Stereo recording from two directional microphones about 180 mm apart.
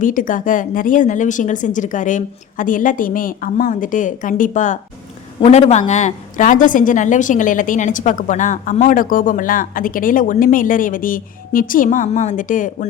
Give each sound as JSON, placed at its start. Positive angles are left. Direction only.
{"t": 0.0, "sound": "a woman's voice", "side_deg": 50}